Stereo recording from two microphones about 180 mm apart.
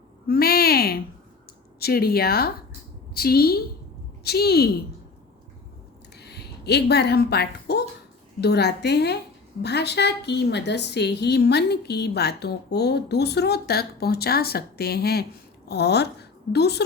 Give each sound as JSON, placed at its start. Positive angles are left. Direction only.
{"t": 0.3, "sound": "a sound", "side_deg": 60}
{"t": 1.8, "sound": "a woman's voice", "side_deg": 60}
{"t": 6.1, "sound": "a woman's voice", "side_deg": 65}